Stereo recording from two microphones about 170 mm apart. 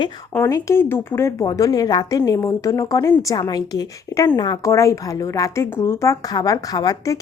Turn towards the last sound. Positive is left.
turn(degrees=20)  # may be behind; listen again after turning